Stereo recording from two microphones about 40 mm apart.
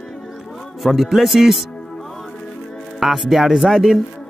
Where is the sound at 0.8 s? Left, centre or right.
Centre.